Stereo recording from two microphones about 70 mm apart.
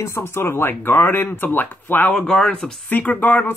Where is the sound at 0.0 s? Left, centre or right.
Left.